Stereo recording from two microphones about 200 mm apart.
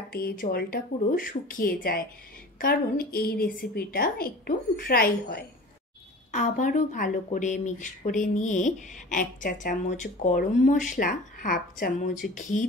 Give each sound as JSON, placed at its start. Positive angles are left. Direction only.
{"t": 0.1, "sound": "a woman's voice", "side_deg": 50}
{"t": 6.3, "sound": "speech", "side_deg": 40}